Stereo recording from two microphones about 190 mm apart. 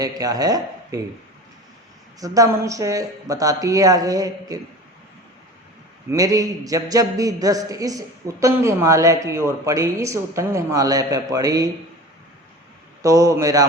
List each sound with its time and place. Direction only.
0.0 s speech: 20° right (ahead or behind)
2.2 s a man's voice: 20° right (ahead or behind)
6.1 s a man's voice: 20° right (ahead or behind)
13.0 s a man's voice: 15° right (ahead or behind)